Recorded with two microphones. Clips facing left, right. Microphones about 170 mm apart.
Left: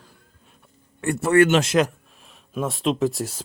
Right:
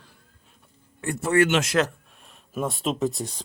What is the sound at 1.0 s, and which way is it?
Speech, 65° left (ahead or behind).